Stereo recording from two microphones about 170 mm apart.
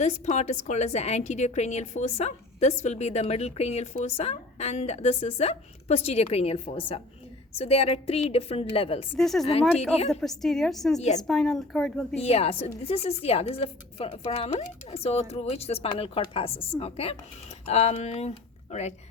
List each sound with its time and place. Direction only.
0.0 s a woman's voice: 45° left (ahead or behind)
9.1 s a woman's voice: centre (ahead or behind)
9.5 s a woman's voice: 35° left (ahead or behind)
10.1 s a woman's voice: centre (ahead or behind)
12.2 s a woman's voice: 35° left (ahead or behind)